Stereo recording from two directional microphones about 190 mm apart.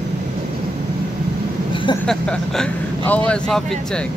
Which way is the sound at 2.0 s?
5° left (ahead or behind).